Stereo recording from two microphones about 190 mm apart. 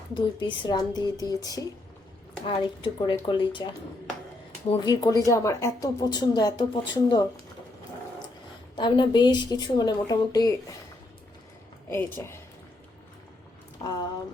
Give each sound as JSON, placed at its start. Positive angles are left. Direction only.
{"t": 0.1, "sound": "speech", "side_deg": 25}
{"t": 4.7, "sound": "speech", "side_deg": 20}
{"t": 8.7, "sound": "speech", "side_deg": 25}
{"t": 11.9, "sound": "speech", "side_deg": 10}
{"t": 13.8, "sound": "a sound", "side_deg": 20}